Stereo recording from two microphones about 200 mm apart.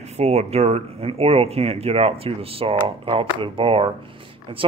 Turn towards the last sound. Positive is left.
turn(degrees=-25)  # may be behind; listen again after turning